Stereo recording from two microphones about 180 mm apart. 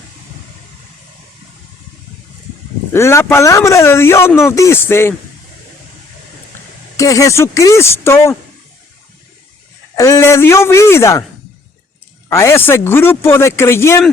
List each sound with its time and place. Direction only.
2.9 s speech: 15° left (ahead or behind)
6.9 s speech: 20° left (ahead or behind)
9.9 s speech: 15° left (ahead or behind)
12.3 s speech: 15° left (ahead or behind)